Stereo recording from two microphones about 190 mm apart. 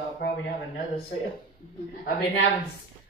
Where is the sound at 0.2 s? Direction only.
65° left (ahead or behind).